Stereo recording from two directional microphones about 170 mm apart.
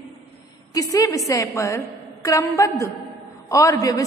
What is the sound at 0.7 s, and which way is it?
A woman's voice, 20° left (ahead or behind).